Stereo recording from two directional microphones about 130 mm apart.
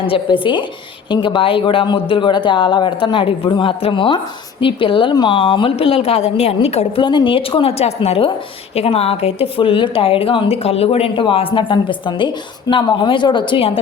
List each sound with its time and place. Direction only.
0.0 s a woman's voice: 40° left (ahead or behind)
7.0 s a woman's voice: 35° left (ahead or behind)